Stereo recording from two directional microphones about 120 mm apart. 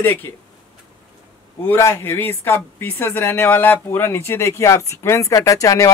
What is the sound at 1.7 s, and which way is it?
Speech, 20° left (ahead or behind).